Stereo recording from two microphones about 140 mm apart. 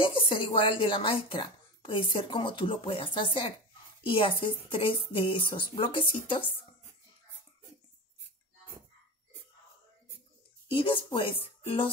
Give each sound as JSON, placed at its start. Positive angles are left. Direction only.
{"t": 0.0, "sound": "speech", "side_deg": 40}
{"t": 10.7, "sound": "speech", "side_deg": 40}